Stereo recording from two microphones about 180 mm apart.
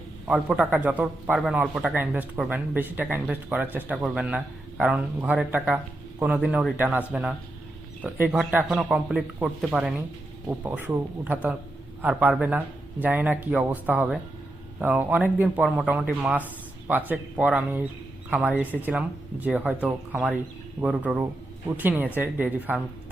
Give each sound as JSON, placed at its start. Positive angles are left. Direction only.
{"t": 0.3, "sound": "a man's voice", "side_deg": -5}